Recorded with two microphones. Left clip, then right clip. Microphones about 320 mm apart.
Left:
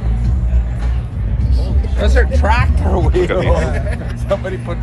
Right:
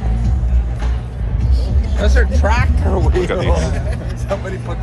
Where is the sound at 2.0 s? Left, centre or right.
Left.